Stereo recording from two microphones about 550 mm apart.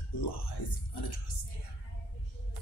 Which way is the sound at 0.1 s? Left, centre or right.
Left.